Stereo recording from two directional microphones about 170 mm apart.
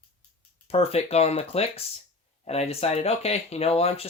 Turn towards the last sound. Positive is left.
turn(degrees=35)  # may be behind; listen again after turning